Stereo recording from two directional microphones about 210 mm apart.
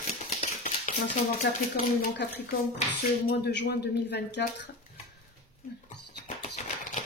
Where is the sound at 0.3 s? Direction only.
35° left (ahead or behind).